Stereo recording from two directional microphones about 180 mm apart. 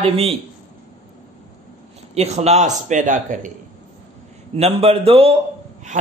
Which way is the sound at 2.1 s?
35° right (ahead or behind).